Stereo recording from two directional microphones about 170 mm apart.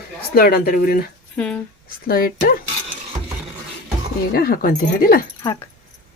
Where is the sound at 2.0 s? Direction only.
60° left (ahead or behind).